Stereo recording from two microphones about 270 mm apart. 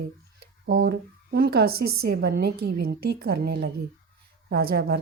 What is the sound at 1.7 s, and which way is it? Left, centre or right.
Speech, right.